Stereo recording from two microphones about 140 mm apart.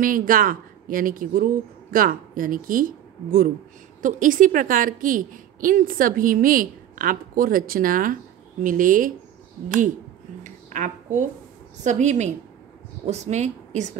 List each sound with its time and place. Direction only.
0.0 s a woman's voice: 80° right
4.0 s a woman's voice: 70° right (ahead or behind)
8.6 s speech: 70° right (ahead or behind)
10.4 s a sound: 60° right (ahead or behind)
11.8 s a woman's voice: 60° right (ahead or behind)